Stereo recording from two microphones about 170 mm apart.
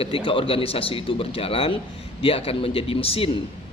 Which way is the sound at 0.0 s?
35° left (ahead or behind).